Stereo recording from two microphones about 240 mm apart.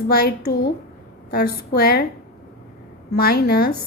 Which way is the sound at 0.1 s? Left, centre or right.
Left.